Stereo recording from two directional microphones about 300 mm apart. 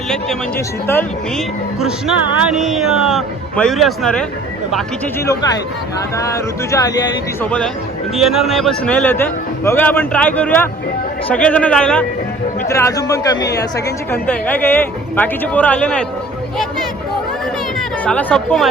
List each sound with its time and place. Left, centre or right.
0.1 s a man's voice: centre
2.6 s a man's voice: centre
5.2 s speech: centre
8.1 s a man's voice: centre
18.0 s a man's voice: centre